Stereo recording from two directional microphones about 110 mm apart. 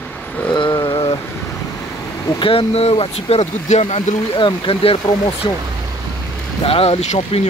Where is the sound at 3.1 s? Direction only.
80° left.